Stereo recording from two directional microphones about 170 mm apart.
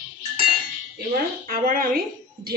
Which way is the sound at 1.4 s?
55° right (ahead or behind).